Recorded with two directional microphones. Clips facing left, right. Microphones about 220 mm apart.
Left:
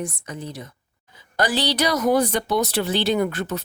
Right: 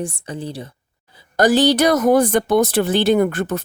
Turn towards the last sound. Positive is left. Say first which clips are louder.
# right 6 dB
turn(degrees=-50)  # may be behind; listen again after turning